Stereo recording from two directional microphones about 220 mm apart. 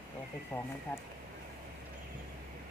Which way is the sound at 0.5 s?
10° left (ahead or behind).